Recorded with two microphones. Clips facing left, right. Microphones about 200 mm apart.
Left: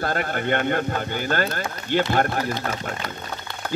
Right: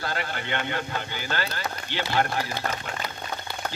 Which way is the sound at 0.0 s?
50° left (ahead or behind).